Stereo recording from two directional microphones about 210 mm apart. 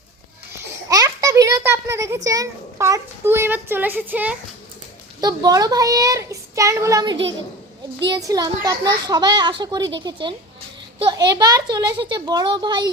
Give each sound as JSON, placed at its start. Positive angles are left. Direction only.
{"t": 0.9, "sound": "a child's voice", "side_deg": -15}
{"t": 5.2, "sound": "speech", "side_deg": -20}